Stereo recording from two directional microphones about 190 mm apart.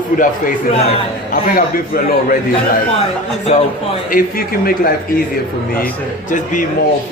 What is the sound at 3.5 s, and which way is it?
Speech, 40° left (ahead or behind).